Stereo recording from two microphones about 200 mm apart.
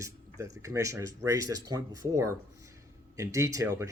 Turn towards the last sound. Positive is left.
turn(degrees=-15)  # may be behind; listen again after turning